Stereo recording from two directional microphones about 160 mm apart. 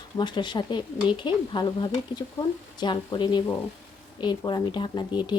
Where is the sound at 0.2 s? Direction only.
30° left (ahead or behind).